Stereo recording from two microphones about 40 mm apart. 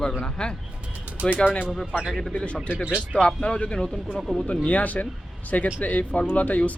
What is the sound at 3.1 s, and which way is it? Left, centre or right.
Speech, left.